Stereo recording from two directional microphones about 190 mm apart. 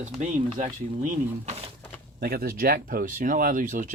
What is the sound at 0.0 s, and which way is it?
Speech, 40° right (ahead or behind).